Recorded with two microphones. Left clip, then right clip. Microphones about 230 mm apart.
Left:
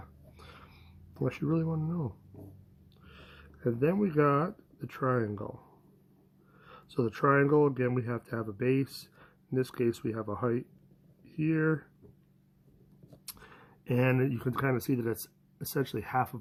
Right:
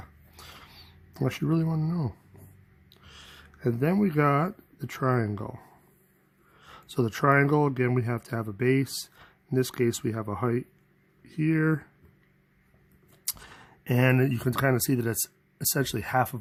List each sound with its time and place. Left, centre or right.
0.0 s a sound: right
2.9 s speech: right
6.6 s speech: right
13.4 s speech: right